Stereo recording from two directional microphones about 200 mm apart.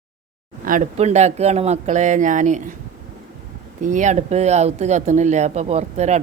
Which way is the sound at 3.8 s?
40° right (ahead or behind).